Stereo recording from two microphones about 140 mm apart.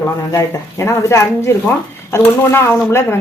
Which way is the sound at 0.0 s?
20° left (ahead or behind).